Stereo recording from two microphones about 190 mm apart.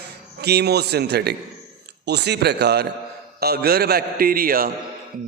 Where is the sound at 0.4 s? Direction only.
60° right (ahead or behind).